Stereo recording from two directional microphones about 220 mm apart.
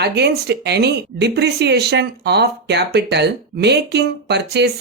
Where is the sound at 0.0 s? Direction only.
50° right (ahead or behind).